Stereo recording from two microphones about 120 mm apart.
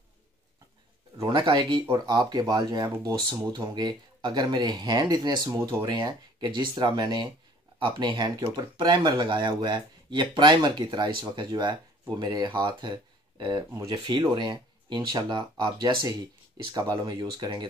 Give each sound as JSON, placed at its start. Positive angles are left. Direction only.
{"t": 1.5, "sound": "speech", "side_deg": -30}
{"t": 5.5, "sound": "speech", "side_deg": -20}
{"t": 5.8, "sound": "speech", "side_deg": -35}